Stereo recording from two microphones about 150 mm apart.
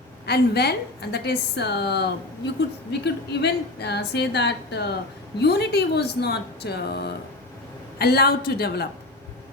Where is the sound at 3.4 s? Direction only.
90° left.